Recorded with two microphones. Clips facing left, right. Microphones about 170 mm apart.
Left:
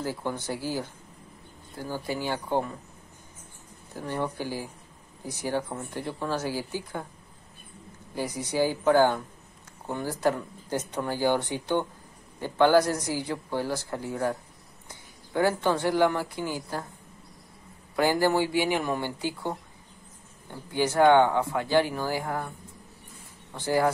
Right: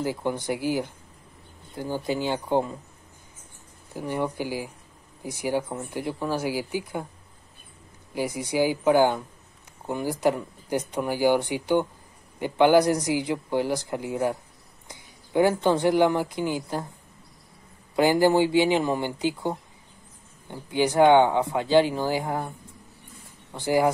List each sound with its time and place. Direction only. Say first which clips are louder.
0.0 s speech: right 4 dB; 15° right (ahead or behind)
3.9 s speech: right 3 dB; 15° right (ahead or behind)
8.1 s speech: right 3 dB; 10° right (ahead or behind)
17.9 s speech: right 4 dB; 15° right (ahead or behind)
23.5 s speech: right 3 dB; 15° right (ahead or behind)